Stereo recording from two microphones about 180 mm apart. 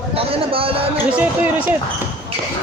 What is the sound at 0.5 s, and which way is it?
Speech, 30° right (ahead or behind).